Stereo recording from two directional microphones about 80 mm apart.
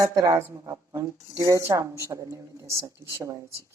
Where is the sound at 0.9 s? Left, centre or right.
Right.